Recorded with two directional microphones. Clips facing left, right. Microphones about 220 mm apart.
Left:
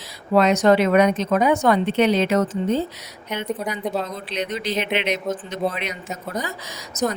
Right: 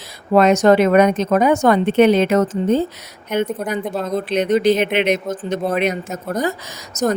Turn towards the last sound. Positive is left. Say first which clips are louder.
# right 4 dB
turn(degrees=-45)  # may be behind; listen again after turning